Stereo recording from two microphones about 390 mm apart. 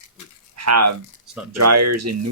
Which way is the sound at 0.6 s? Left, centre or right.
Right.